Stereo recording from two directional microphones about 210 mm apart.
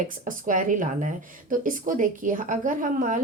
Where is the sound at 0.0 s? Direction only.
40° right (ahead or behind).